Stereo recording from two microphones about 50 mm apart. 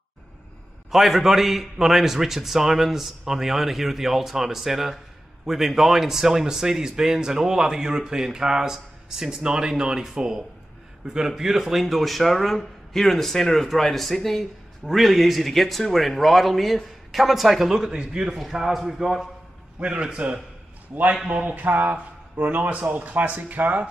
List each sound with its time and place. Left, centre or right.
0.8 s a man's voice: centre
19.8 s a man's voice: centre; by 23.9 s right